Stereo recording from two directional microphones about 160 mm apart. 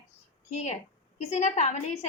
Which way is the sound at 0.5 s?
45° left (ahead or behind).